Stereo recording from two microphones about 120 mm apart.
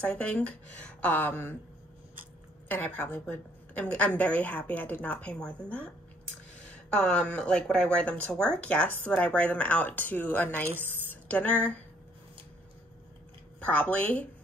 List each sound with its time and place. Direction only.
0.0 s a woman's voice: 10° left (ahead or behind)
2.7 s a woman's voice: 15° left (ahead or behind)
6.9 s a woman's voice: 5° left (ahead or behind)
10.7 s a woman's voice: 20° right (ahead or behind)
11.1 s a sound: 10° left (ahead or behind)
13.7 s a woman's voice: 10° left (ahead or behind)